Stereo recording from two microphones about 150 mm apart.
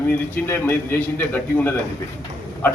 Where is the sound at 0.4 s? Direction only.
15° left (ahead or behind).